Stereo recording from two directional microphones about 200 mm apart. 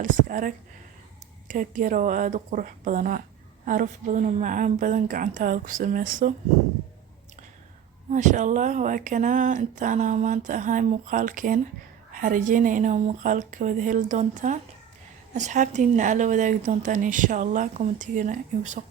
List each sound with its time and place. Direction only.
0.0 s speech: 40° right (ahead or behind)
8.1 s speech: 35° right (ahead or behind)